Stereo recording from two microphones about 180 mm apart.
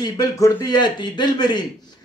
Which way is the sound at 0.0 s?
20° left (ahead or behind).